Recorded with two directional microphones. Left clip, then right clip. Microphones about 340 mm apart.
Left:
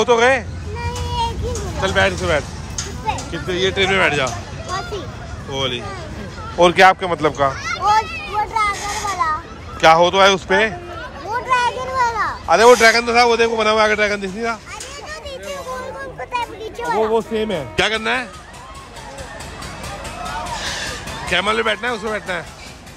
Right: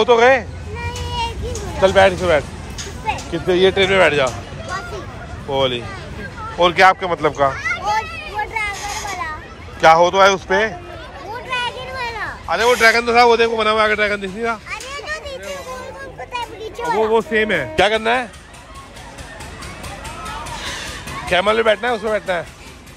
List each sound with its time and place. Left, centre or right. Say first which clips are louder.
0.0 s a sound: right 2 dB; centre
1.8 s speech: right 5 dB; centre
5.5 s a man's voice: right 4 dB; centre
7.5 s children playing: right 3 dB; right
8.7 s a sound: left 2 dB; left
9.8 s a man's voice: right 1 dB; centre
11.9 s children playing: left 7 dB; centre
12.4 s a man's voice: left 3 dB; centre
15.0 s a sound: right 1 dB; centre
21.3 s speech: right 3 dB; centre